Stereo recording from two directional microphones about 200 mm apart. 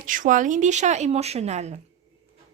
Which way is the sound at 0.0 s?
40° right (ahead or behind).